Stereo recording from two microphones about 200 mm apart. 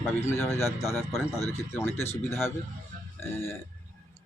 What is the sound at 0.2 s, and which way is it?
A man's voice, 10° left (ahead or behind).